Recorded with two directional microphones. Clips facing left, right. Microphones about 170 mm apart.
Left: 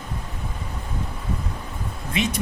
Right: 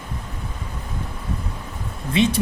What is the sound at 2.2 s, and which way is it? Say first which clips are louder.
Speech: right 6 dB; 30° right (ahead or behind).